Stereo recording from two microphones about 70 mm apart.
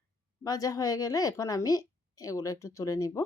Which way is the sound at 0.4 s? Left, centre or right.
Left.